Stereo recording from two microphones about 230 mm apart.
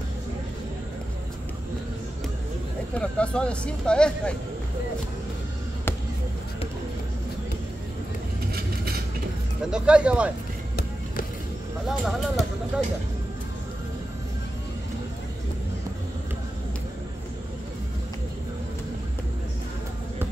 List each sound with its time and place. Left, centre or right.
3.0 s speech: centre
8.5 s vehicle: right
9.7 s speech: centre
12.0 s speech: centre